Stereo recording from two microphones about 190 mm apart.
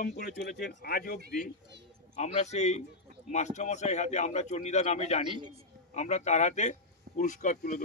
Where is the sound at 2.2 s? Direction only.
35° left (ahead or behind).